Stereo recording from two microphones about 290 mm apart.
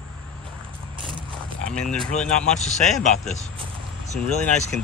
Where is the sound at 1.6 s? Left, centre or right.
Centre.